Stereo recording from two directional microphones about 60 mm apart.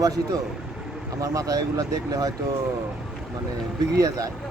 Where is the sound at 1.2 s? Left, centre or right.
Right.